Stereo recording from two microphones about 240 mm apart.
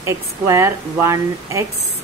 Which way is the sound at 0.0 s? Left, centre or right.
Centre.